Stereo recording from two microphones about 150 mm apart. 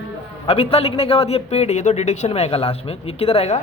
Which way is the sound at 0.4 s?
40° left (ahead or behind).